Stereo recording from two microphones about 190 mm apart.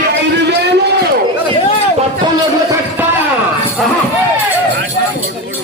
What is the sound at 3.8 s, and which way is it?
Music, centre (ahead or behind).